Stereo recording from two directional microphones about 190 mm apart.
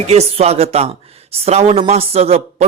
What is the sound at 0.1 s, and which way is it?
Speech, 35° right (ahead or behind).